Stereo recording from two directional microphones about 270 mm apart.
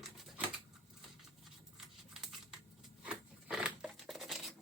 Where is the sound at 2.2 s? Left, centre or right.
Centre.